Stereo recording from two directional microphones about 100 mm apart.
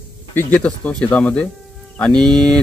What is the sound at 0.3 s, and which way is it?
Speech, 20° left (ahead or behind).